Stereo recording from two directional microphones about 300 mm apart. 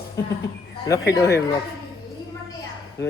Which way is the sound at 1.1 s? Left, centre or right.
Centre.